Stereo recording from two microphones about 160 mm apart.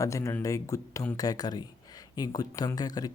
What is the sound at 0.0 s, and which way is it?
Speech, 20° left (ahead or behind).